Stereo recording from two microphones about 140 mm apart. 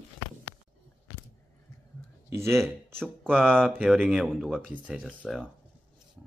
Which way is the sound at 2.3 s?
20° right (ahead or behind).